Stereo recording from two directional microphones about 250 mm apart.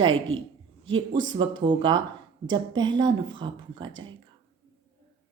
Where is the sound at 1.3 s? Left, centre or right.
Centre.